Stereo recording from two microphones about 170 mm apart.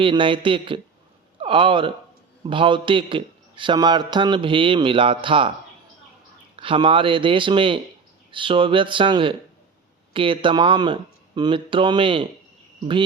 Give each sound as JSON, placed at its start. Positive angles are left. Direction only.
{"t": 0.0, "sound": "a man's voice", "side_deg": -30}
{"t": 6.6, "sound": "a man's voice", "side_deg": -30}